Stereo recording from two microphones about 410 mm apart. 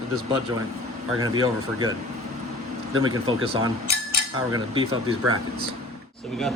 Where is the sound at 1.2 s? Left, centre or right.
Right.